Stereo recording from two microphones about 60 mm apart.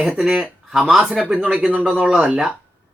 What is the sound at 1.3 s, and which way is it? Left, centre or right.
Speech, right.